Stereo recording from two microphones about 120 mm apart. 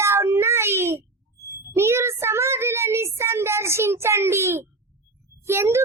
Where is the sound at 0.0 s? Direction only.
20° right (ahead or behind).